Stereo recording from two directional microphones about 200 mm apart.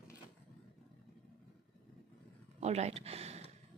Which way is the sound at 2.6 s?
30° right (ahead or behind).